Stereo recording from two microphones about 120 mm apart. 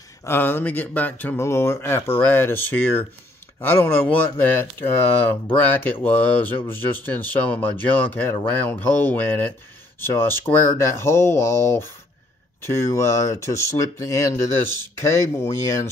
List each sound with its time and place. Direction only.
0.2 s speech: 20° left (ahead or behind)